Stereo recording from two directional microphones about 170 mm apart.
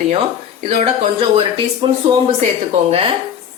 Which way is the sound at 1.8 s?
30° right (ahead or behind).